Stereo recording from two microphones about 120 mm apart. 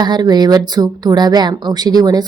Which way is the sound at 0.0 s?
35° right (ahead or behind).